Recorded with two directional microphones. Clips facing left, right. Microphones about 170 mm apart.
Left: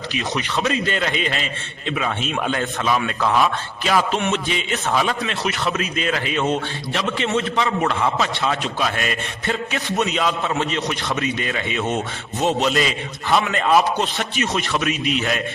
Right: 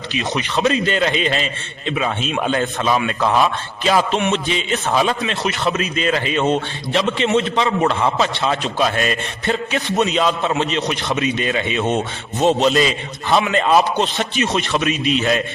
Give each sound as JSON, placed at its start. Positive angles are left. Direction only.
{"t": 0.1, "sound": "a man's voice", "side_deg": -20}